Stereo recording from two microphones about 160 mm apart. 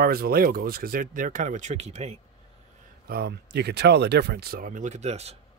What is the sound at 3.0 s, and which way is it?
Speech, 80° right.